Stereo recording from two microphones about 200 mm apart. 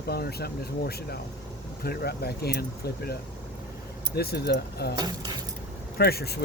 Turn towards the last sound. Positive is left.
turn(degrees=50)  # may be behind; listen again after turning